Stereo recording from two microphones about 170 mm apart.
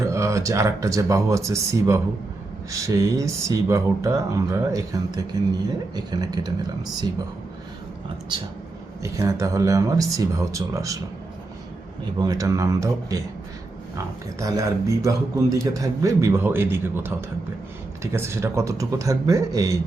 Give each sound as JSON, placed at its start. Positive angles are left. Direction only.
{"t": 0.0, "sound": "a man's voice", "side_deg": -15}
{"t": 9.1, "sound": "a man's voice", "side_deg": -20}
{"t": 12.2, "sound": "a man's voice", "side_deg": -20}
{"t": 14.3, "sound": "a man's voice", "side_deg": -20}